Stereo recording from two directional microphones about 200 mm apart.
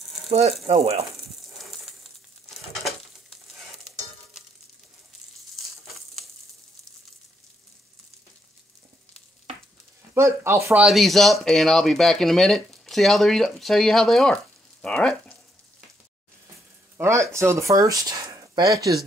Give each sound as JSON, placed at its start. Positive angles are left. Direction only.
{"t": 0.3, "sound": "speech", "side_deg": -30}
{"t": 10.1, "sound": "speech", "side_deg": -10}
{"t": 16.9, "sound": "speech", "side_deg": -15}